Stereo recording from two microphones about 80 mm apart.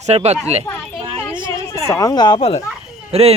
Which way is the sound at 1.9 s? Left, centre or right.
Left.